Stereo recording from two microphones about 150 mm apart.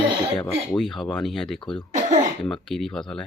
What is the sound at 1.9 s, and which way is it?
Speech, 50° right (ahead or behind).